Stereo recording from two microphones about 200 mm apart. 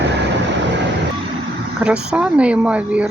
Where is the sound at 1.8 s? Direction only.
5° right (ahead or behind).